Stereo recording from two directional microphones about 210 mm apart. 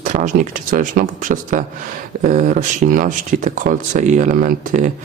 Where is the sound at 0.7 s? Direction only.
40° right (ahead or behind).